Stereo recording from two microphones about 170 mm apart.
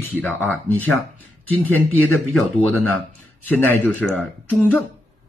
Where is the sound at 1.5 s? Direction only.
10° left (ahead or behind).